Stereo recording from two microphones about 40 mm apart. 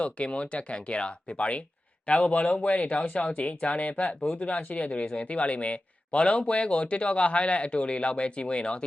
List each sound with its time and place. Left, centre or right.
0.0 s speech: left